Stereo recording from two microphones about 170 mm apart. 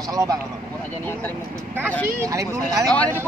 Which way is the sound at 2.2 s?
20° right (ahead or behind).